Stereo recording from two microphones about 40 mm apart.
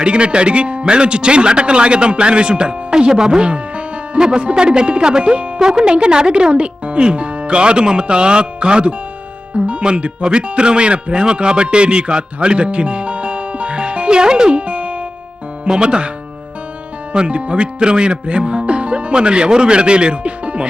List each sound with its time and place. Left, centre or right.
0.0 s speech: right
3.5 s music: right
4.2 s speech: right
5.5 s speech: centre
17.1 s speech: right